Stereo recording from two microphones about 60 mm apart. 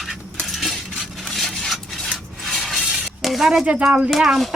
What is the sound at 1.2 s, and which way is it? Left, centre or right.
Rub, centre.